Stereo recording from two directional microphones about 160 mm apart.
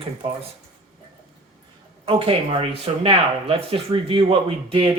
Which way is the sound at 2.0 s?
30° right (ahead or behind).